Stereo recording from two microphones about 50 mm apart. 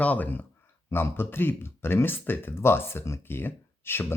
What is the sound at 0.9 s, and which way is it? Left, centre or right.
Speech, left.